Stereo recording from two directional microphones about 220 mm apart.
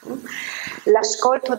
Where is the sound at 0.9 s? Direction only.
25° right (ahead or behind).